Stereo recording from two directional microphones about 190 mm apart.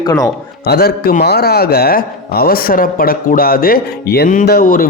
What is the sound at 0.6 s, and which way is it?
A man's voice, 55° left (ahead or behind).